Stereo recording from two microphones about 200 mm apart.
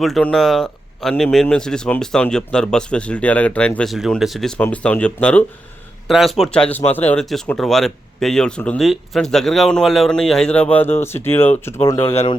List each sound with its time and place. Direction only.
0.0 s speech: 5° left (ahead or behind)
12.0 s speech: 30° left (ahead or behind)